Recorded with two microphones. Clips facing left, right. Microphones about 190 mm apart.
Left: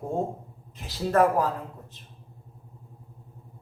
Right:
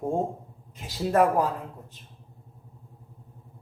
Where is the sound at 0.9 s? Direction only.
15° right (ahead or behind).